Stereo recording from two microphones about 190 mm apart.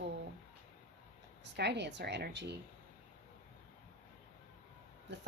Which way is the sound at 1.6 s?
65° right (ahead or behind).